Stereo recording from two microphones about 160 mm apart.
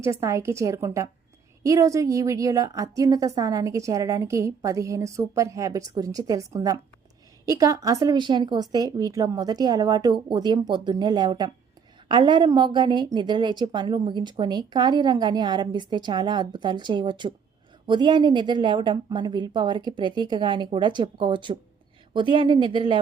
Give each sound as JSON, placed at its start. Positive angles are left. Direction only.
{"t": 0.0, "sound": "a woman's voice", "side_deg": -20}